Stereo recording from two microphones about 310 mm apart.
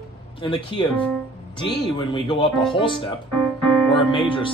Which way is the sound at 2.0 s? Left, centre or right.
Centre.